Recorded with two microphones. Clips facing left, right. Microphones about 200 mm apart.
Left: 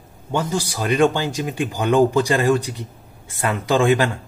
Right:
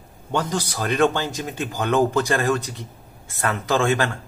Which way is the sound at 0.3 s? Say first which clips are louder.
Left 2 dB; 10° left (ahead or behind).